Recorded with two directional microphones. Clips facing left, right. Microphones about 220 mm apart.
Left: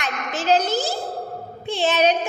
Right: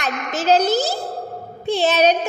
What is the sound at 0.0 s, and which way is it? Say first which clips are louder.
A child's voice: right 3 dB; 40° right (ahead or behind).